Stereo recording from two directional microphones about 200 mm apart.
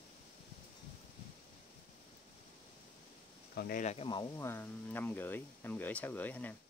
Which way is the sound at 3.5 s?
50° left (ahead or behind).